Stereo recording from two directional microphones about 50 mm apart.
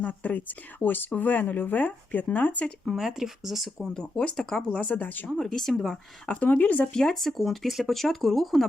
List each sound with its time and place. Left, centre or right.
0.0 s speech: left
2.8 s speech: centre
4.1 s speech: centre
4.8 s speech: left
5.4 s speech: centre
6.6 s speech: left
6.9 s speech: centre